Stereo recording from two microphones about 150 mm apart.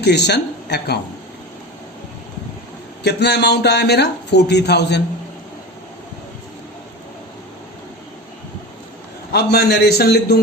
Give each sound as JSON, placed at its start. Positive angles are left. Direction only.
{"t": 0.0, "sound": "speech", "side_deg": 90}
{"t": 3.0, "sound": "speech", "side_deg": 90}
{"t": 9.3, "sound": "speech", "side_deg": 90}